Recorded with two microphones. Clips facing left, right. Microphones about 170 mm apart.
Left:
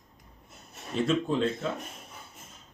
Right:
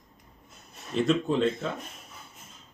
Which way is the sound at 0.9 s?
Centre (ahead or behind).